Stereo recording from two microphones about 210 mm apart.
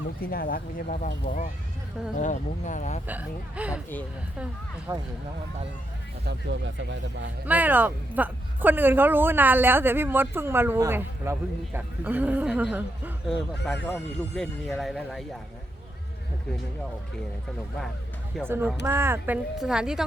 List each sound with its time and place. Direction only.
0.2 s speech: 45° left (ahead or behind)
3.1 s speech: 5° right (ahead or behind)
4.9 s speech: 15° right (ahead or behind)
6.2 s speech: 60° right (ahead or behind)
7.4 s speech: 10° right (ahead or behind)
18.4 s speech: 10° right (ahead or behind)